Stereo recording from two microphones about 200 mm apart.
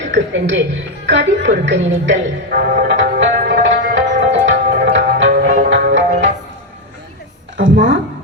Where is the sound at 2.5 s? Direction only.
50° right (ahead or behind).